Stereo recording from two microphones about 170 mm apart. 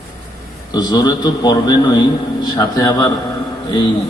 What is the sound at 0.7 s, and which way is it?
A man's voice, 25° left (ahead or behind).